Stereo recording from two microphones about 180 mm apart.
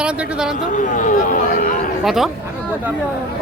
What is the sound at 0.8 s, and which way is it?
Speech, 45° left (ahead or behind).